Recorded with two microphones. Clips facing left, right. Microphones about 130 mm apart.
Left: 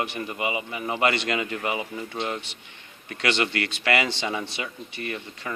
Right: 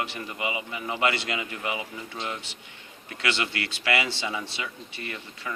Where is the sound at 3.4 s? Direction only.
50° left (ahead or behind).